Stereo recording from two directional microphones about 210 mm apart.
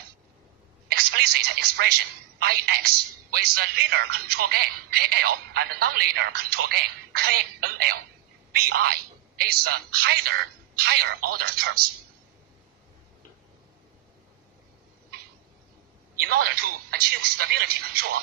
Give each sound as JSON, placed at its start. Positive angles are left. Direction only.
{"t": 0.9, "sound": "telephone", "side_deg": -50}
{"t": 2.4, "sound": "speech", "side_deg": -45}
{"t": 16.1, "sound": "speech", "side_deg": -45}